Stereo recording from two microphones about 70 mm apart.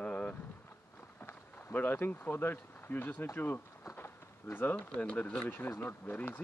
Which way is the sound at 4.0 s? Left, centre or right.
Left.